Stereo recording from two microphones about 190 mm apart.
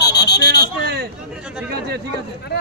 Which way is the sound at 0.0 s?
60° left (ahead or behind).